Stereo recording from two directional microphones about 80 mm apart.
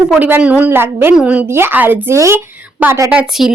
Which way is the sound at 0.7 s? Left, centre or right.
Right.